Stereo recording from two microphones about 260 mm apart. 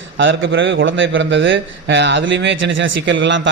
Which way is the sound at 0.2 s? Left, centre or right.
Right.